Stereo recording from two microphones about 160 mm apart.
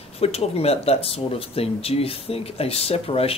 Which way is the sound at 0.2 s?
40° left (ahead or behind).